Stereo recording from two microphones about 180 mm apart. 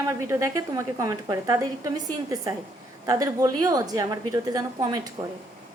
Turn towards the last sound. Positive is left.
turn(degrees=-20)  # may be behind; listen again after turning